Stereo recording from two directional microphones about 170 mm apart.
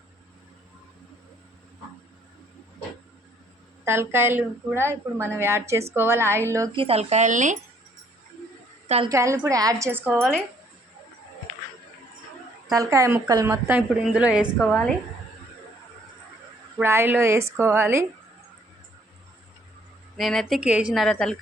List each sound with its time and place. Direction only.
3.8 s speech: 15° right (ahead or behind)
6.7 s speech: 35° right (ahead or behind)
9.0 s speech: 15° right (ahead or behind)
10.2 s a woman's voice: centre (ahead or behind)
12.7 s speech: 20° right (ahead or behind)
14.6 s a woman's voice: 10° left (ahead or behind)
16.7 s speech: 15° right (ahead or behind)
20.1 s a woman's voice: centre (ahead or behind)